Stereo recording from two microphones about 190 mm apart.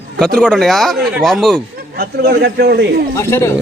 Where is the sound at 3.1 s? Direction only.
15° left (ahead or behind).